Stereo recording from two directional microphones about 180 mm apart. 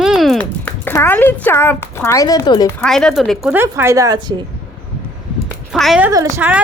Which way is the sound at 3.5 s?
10° right (ahead or behind).